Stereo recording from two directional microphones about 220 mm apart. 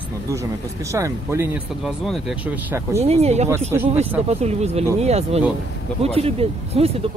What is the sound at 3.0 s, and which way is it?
Speech, 30° right (ahead or behind).